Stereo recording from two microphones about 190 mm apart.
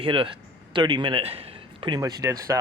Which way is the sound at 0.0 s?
30° right (ahead or behind).